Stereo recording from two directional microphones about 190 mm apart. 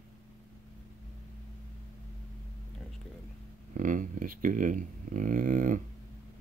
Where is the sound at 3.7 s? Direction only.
45° right (ahead or behind).